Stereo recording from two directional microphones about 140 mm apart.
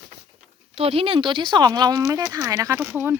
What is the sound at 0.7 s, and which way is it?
Speech, 45° right (ahead or behind).